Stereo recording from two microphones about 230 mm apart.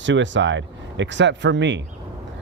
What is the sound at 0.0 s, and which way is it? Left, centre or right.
Speech, right.